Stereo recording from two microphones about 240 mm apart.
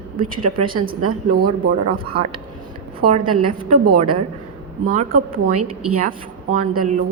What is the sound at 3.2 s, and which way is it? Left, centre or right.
Speech, right.